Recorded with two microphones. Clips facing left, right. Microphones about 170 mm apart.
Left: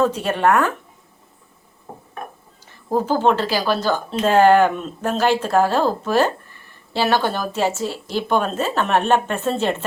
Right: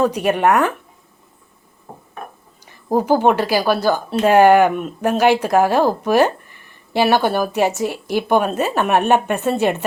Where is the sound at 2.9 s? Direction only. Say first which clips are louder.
Right 3 dB; 15° right (ahead or behind).